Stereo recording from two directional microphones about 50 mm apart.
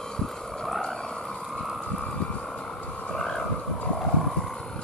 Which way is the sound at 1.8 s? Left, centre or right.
Centre.